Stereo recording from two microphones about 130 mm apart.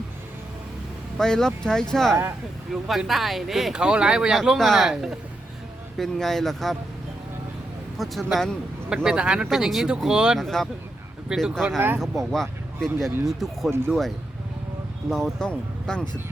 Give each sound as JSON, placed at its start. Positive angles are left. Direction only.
{"t": 1.2, "sound": "speech", "side_deg": 5}
{"t": 7.9, "sound": "speech", "side_deg": 0}
{"t": 9.0, "sound": "speech", "side_deg": -5}
{"t": 13.7, "sound": "speech", "side_deg": -20}
{"t": 15.1, "sound": "speech", "side_deg": 5}